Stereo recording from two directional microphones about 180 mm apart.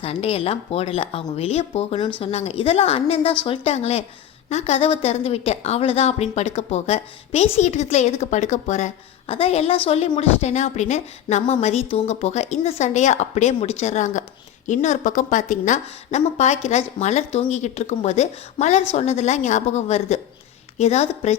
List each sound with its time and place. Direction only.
0.0 s a woman's voice: 35° left (ahead or behind)